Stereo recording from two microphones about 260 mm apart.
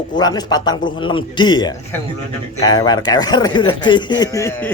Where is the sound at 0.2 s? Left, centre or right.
Centre.